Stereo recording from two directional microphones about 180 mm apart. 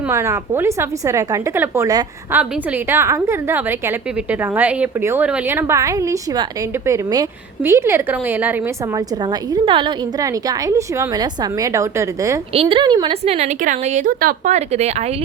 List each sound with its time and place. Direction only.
0.1 s a woman's voice: 15° right (ahead or behind)
12.5 s speech: 30° right (ahead or behind)